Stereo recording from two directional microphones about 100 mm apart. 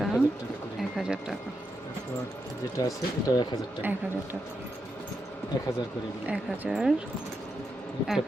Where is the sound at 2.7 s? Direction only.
35° left (ahead or behind).